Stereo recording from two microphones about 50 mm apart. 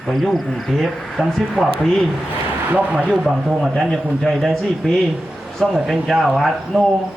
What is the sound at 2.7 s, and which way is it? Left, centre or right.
Speech, right.